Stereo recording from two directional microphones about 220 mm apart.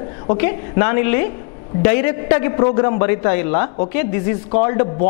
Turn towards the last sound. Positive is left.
turn(degrees=15)  # may be behind; listen again after turning